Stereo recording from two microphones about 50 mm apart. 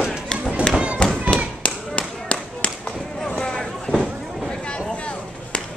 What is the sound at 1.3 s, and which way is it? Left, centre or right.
Thump, left.